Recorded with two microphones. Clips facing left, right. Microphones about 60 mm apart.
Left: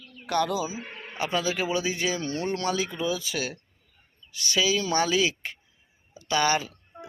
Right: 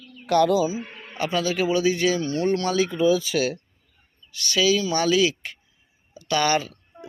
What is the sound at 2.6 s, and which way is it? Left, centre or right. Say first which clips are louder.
Speech: right 8 dB; centre.